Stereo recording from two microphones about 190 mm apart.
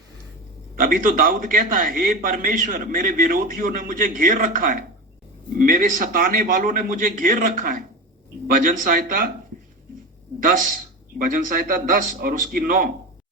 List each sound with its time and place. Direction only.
0.8 s a man's voice: 45° right (ahead or behind)
10.4 s a man's voice: 45° right (ahead or behind)